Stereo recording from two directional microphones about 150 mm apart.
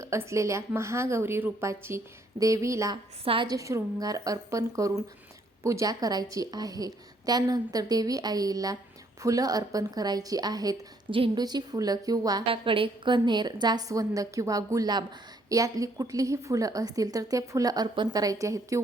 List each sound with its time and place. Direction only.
0.0 s a woman's voice: 20° right (ahead or behind)
2.9 s a woman's voice: 35° right (ahead or behind)
12.5 s a woman's voice: 35° right (ahead or behind); by 18.8 s 20° right (ahead or behind)